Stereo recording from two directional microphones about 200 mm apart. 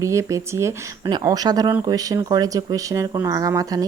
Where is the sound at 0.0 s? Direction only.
15° right (ahead or behind).